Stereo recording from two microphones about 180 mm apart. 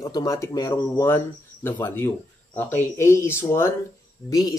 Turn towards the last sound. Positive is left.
turn(degrees=20)  # may be behind; listen again after turning